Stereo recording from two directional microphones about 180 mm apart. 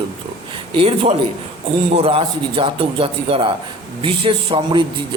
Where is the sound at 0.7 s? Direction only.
30° right (ahead or behind).